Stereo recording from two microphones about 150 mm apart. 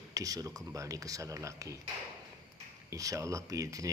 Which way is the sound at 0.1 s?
25° right (ahead or behind).